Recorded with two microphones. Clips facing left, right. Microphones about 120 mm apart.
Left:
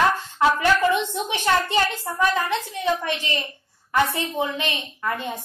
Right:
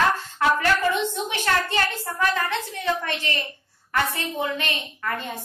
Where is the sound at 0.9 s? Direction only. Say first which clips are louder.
Left 2 dB; 20° left (ahead or behind).